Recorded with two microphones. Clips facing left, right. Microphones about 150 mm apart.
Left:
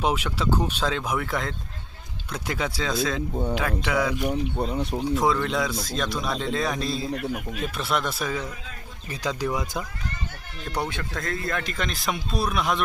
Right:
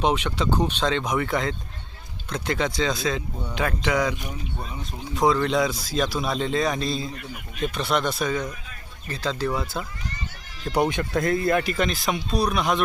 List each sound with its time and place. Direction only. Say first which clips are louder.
0.0 s speech: right 2 dB; 5° left (ahead or behind)
4.2 s speech: left 9 dB; 65° left (ahead or behind)
5.1 s speech: right 4 dB; centre (ahead or behind)
10.7 s speech: right 7 dB; 15° right (ahead or behind); by 12.8 s centre (ahead or behind)